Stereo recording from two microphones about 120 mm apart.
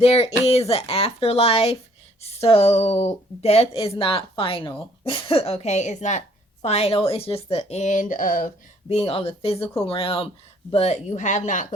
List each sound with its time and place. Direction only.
0.0 s a woman's voice: 60° left (ahead or behind); by 6.2 s 85° left
6.6 s a woman's voice: 60° left (ahead or behind)
7.5 s speech: 70° left (ahead or behind); by 11.7 s 90° left